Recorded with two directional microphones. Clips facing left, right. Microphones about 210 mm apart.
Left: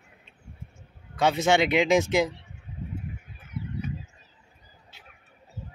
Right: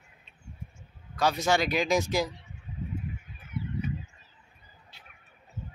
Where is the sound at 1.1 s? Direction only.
25° left (ahead or behind).